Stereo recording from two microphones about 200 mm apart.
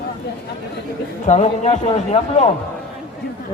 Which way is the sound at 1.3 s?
35° left (ahead or behind).